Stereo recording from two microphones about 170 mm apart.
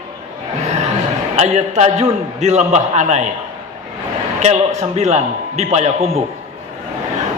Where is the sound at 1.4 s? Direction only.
40° right (ahead or behind).